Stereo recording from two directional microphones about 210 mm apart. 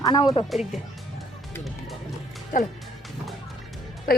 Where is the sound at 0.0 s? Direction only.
20° left (ahead or behind).